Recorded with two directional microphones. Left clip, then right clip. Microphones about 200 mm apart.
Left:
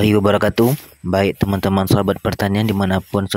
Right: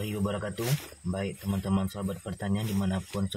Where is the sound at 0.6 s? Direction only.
35° left (ahead or behind).